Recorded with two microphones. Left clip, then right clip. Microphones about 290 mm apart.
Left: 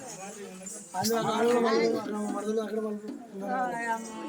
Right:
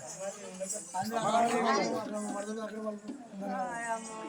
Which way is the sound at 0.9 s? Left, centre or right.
Centre.